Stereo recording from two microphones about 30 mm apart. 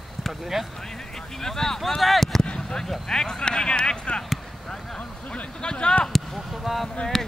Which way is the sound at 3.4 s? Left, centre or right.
Left.